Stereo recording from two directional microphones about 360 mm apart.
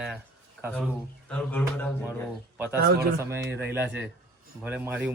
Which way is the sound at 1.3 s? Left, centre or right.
Centre.